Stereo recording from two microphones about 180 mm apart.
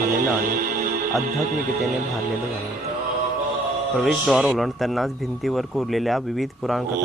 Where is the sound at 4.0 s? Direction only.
Centre (ahead or behind).